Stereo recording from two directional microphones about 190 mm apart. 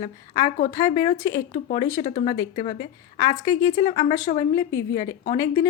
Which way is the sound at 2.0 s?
40° left (ahead or behind).